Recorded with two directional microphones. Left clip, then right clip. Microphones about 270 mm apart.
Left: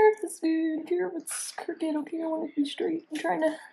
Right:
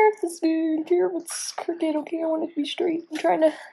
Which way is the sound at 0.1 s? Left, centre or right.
Right.